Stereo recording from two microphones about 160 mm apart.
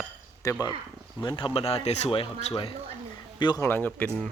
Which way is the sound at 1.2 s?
30° left (ahead or behind).